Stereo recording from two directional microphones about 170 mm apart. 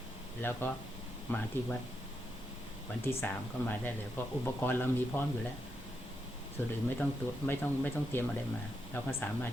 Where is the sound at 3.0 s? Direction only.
15° left (ahead or behind).